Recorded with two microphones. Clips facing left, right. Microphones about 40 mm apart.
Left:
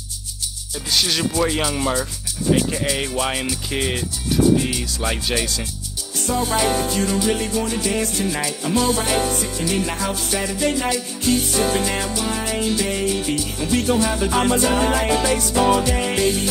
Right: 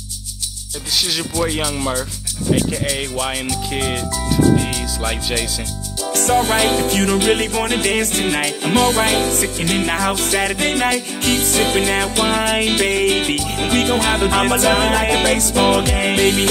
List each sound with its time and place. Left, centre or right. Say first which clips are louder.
0.9 s music: even; centre
6.1 s music: right 5 dB; right